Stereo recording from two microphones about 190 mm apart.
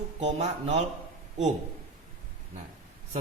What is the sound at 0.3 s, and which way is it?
Speech, 35° right (ahead or behind).